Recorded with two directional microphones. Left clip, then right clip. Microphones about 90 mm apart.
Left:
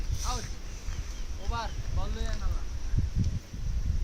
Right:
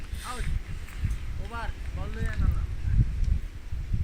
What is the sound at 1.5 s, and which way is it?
Boat, 20° left (ahead or behind).